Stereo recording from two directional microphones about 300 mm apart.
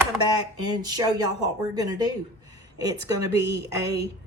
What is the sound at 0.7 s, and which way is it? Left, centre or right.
A woman's voice, centre.